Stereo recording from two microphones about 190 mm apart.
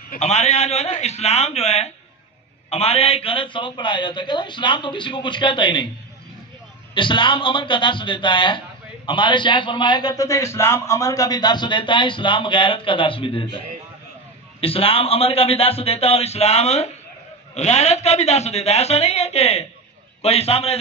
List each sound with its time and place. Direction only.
0.1 s a man's voice: 35° left (ahead or behind)
6.9 s a man's voice: 25° left (ahead or behind)
14.6 s a man's voice: 30° left (ahead or behind)